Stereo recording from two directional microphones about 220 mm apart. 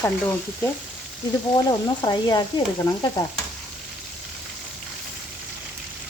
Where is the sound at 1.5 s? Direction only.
15° left (ahead or behind).